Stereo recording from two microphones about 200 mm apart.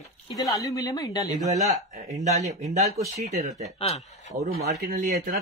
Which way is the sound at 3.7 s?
30° left (ahead or behind).